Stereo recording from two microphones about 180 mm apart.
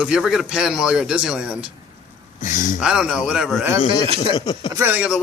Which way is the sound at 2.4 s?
45° left (ahead or behind).